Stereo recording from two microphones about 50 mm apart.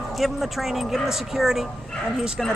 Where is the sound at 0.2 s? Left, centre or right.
Centre.